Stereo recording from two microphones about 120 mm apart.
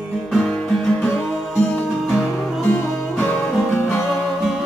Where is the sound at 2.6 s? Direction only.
15° left (ahead or behind).